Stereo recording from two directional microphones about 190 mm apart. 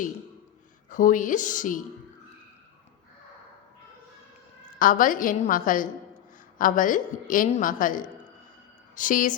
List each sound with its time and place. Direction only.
0.9 s a woman's voice: 45° left (ahead or behind)
4.8 s a woman's voice: 45° left (ahead or behind)